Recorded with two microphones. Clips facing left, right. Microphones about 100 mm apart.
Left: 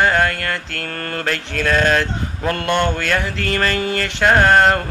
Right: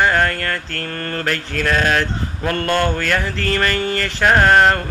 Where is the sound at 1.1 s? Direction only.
20° left (ahead or behind).